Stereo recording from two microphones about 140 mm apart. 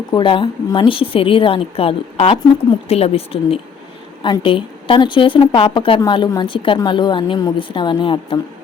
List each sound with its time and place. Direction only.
0.1 s a woman's voice: 35° left (ahead or behind)